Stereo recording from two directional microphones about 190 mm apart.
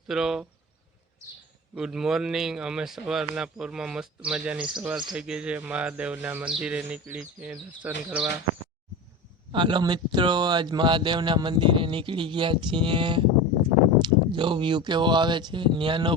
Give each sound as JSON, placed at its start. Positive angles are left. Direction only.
{"t": 0.1, "sound": "speech", "side_deg": -5}
{"t": 1.7, "sound": "speech", "side_deg": -5}
{"t": 9.5, "sound": "speech", "side_deg": -25}